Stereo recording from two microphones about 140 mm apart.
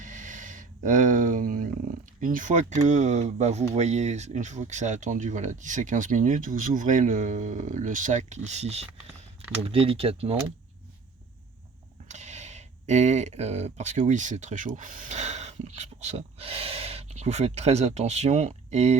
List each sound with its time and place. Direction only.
0.0 s a sound: 65° right (ahead or behind)
2.2 s speech: 70° right (ahead or behind)
8.4 s speech: 50° right (ahead or behind)
12.0 s speech: 55° right (ahead or behind)